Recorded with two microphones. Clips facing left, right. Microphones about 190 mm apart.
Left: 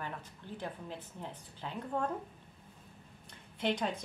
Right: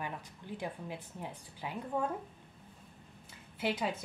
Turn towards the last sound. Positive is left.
turn(degrees=-5)  # may be behind; listen again after turning